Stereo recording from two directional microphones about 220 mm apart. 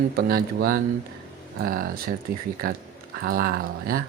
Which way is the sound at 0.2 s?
45° right (ahead or behind).